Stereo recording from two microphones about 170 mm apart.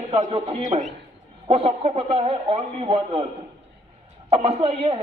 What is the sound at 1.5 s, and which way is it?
A man's voice, 35° right (ahead or behind).